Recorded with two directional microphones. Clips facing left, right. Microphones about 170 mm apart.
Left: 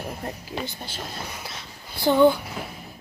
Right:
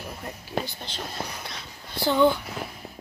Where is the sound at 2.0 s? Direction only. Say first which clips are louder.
Left 3 dB; 15° left (ahead or behind).